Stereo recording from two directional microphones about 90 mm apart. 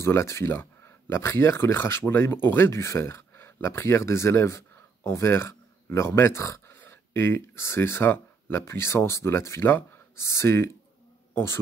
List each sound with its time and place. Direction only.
0.0 s speech: 30° left (ahead or behind)